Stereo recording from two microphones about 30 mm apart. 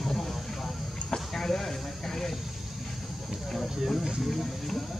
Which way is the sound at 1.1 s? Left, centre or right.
Centre.